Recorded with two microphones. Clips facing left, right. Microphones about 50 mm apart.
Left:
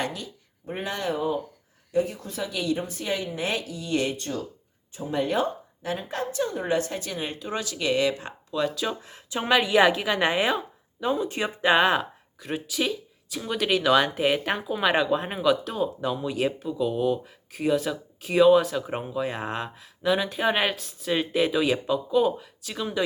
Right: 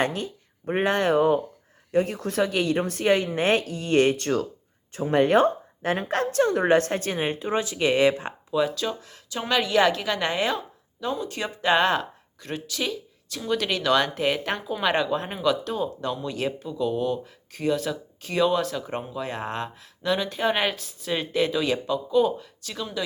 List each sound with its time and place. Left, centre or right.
0.0 s speech: right
2.8 s speech: right
4.2 s speech: right
7.2 s speech: right
8.4 s speech: centre
8.7 s speech: centre
9.0 s speech: left